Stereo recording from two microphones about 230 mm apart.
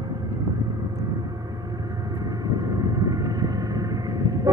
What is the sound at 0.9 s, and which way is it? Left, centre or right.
Vehicle, centre.